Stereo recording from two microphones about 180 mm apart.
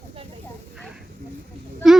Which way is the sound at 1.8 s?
Centre (ahead or behind).